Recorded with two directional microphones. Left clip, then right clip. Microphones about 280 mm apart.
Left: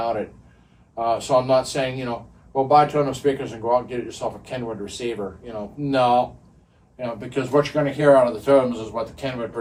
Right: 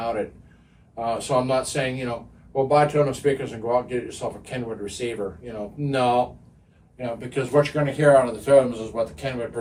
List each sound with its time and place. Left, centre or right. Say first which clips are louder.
0.9 s speech: left 4 dB; centre